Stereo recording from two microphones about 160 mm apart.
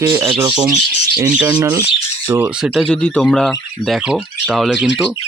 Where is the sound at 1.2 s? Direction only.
10° right (ahead or behind).